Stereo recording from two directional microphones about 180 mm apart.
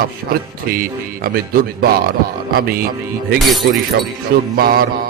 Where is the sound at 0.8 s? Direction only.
55° right (ahead or behind).